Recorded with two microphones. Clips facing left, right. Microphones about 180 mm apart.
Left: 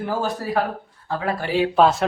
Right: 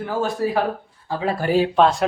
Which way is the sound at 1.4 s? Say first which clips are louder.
Right 5 dB; 45° right (ahead or behind).